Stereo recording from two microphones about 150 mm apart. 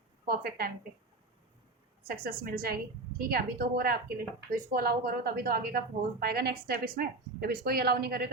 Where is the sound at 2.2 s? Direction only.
85° right.